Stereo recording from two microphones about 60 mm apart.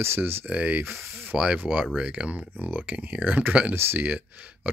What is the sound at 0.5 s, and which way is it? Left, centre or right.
Speech, right.